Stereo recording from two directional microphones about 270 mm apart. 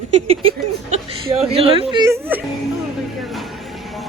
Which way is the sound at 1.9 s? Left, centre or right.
Centre.